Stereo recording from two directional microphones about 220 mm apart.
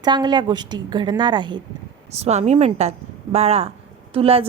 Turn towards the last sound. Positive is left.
turn(degrees=-25)  # may be behind; listen again after turning